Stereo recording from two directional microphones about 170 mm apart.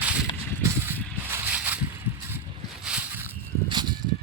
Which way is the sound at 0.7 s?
10° right (ahead or behind).